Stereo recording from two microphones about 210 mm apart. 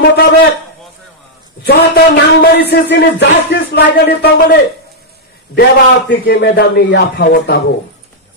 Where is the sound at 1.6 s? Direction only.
45° left (ahead or behind).